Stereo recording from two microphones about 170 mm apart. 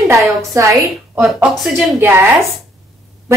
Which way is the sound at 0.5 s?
20° right (ahead or behind).